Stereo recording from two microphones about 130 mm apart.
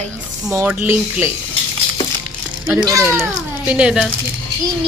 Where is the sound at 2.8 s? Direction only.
25° right (ahead or behind); by 4.1 s 5° right (ahead or behind).